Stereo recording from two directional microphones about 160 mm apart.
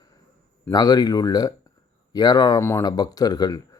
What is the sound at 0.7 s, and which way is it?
Speech, 25° left (ahead or behind).